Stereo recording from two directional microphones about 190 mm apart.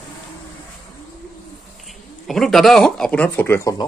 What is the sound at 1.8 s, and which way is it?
Speech, centre (ahead or behind).